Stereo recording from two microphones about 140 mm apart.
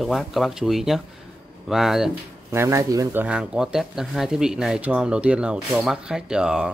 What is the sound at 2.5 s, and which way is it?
A man's voice, 20° right (ahead or behind).